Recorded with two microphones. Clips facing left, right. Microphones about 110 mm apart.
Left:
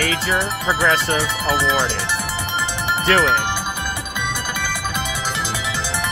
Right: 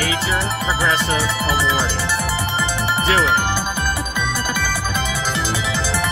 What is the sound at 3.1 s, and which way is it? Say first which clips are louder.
Speech: left 2 dB; 10° right (ahead or behind).